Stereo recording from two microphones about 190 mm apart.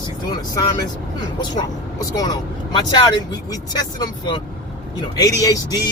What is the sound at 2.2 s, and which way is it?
Speech, 20° left (ahead or behind).